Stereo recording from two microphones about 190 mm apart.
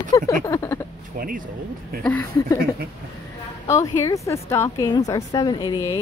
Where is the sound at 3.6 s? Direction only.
15° left (ahead or behind).